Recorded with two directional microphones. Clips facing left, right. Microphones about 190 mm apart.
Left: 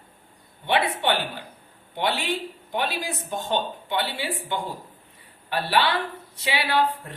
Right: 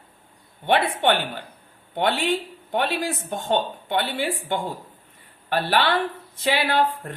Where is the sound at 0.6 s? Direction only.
55° right (ahead or behind).